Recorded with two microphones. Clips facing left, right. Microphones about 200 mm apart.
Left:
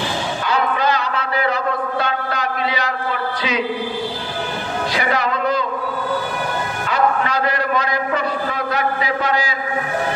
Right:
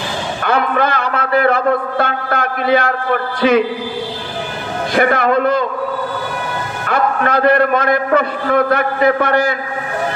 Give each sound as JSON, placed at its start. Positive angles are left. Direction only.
{"t": 0.4, "sound": "a man's voice", "side_deg": -55}
{"t": 4.9, "sound": "a man's voice", "side_deg": -55}
{"t": 6.9, "sound": "a man's voice", "side_deg": -55}